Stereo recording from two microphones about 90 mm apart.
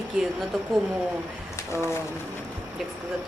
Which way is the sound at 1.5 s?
30° left (ahead or behind).